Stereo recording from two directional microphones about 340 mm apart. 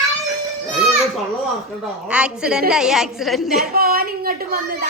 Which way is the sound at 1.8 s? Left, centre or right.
Centre.